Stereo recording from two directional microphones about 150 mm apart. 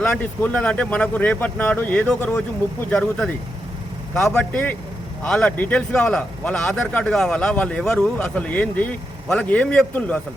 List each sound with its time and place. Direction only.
0.0 s a man's voice: 10° left (ahead or behind)
4.1 s a man's voice: 5° left (ahead or behind)